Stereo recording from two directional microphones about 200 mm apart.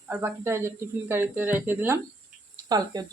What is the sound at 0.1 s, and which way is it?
Speech, 10° right (ahead or behind).